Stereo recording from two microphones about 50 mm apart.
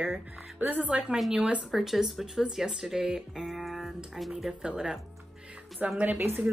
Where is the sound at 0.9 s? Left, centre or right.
Centre.